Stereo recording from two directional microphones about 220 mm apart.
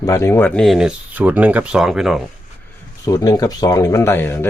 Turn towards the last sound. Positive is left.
turn(degrees=10)  # may be behind; listen again after turning